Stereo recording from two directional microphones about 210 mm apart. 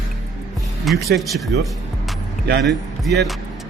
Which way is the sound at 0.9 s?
Centre (ahead or behind).